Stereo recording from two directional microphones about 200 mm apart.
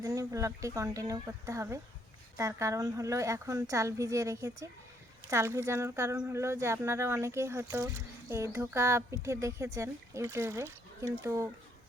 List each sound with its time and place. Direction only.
0.0 s a woman's voice: 15° right (ahead or behind)